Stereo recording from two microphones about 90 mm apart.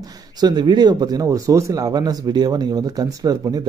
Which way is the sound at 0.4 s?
55° right (ahead or behind).